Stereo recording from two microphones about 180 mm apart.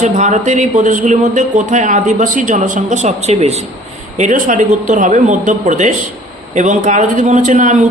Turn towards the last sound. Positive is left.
turn(degrees=-45)  # may be behind; listen again after turning